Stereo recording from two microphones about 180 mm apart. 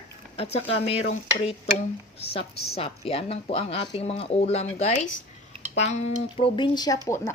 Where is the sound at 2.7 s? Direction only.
35° left (ahead or behind).